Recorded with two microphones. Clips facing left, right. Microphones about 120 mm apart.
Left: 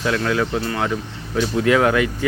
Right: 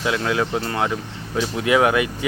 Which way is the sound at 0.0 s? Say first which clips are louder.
Left 1 dB; 20° right (ahead or behind).